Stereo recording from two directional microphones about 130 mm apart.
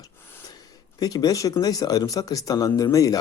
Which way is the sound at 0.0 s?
15° left (ahead or behind).